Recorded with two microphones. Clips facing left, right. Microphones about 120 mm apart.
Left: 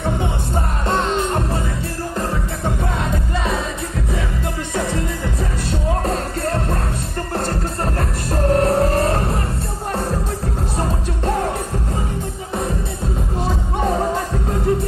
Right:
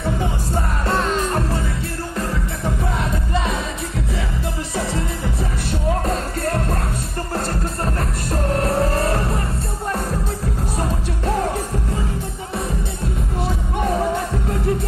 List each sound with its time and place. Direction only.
0.8 s music: 30° left (ahead or behind)
5.7 s music: 30° left (ahead or behind)
10.8 s music: 30° left (ahead or behind)
13.7 s music: 30° left (ahead or behind)